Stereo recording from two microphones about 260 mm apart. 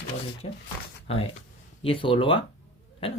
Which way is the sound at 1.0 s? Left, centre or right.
Left.